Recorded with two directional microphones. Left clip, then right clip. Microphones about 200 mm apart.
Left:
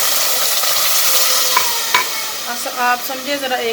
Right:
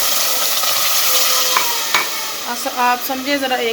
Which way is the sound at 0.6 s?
15° left (ahead or behind).